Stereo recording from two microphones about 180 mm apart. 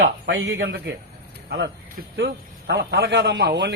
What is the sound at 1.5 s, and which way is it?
A man's voice, 65° right (ahead or behind).